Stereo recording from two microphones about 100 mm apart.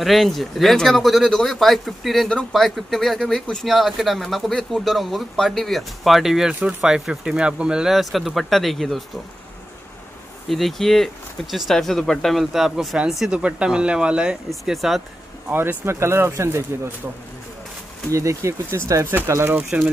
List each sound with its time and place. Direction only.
0.0 s speech: centre (ahead or behind)
10.5 s speech: centre (ahead or behind)
15.5 s speech: 20° right (ahead or behind)
18.1 s speech: 30° right (ahead or behind)